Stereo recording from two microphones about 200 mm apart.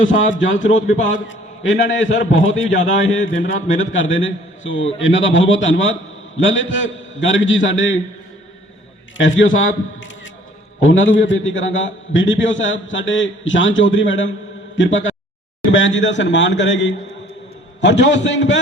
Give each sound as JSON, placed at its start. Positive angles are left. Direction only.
{"t": 0.0, "sound": "a man's voice", "side_deg": 70}
{"t": 0.8, "sound": "a man's voice", "side_deg": 40}
{"t": 1.3, "sound": "a man's voice", "side_deg": 70}
{"t": 3.8, "sound": "a man's voice", "side_deg": 70}
{"t": 9.1, "sound": "a man's voice", "side_deg": 70}